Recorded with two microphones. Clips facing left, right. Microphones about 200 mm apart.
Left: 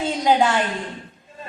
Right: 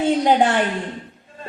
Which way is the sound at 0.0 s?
60° right (ahead or behind).